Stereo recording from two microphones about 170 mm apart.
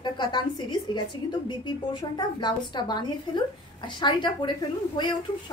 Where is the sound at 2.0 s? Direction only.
25° left (ahead or behind).